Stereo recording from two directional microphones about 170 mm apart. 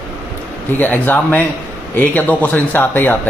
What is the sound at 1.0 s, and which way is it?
Speech, 10° left (ahead or behind).